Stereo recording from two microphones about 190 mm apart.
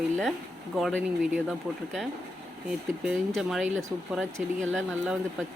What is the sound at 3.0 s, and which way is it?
Speech, centre (ahead or behind).